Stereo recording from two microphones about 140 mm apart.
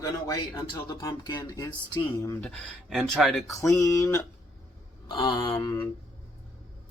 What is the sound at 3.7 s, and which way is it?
Speech, 20° left (ahead or behind).